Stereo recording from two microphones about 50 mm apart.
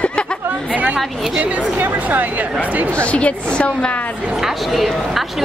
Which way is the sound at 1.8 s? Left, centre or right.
Right.